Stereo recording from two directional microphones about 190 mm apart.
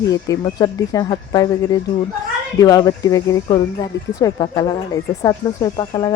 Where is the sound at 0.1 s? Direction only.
20° left (ahead or behind).